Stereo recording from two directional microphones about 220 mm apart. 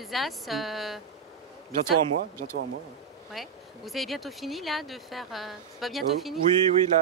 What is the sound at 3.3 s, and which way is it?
Speech, centre (ahead or behind).